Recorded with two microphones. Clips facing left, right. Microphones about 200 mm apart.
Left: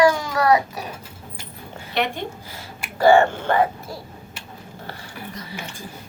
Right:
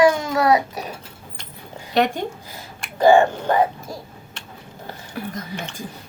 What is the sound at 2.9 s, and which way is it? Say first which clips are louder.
Speech: right 1 dB; 15° right (ahead or behind).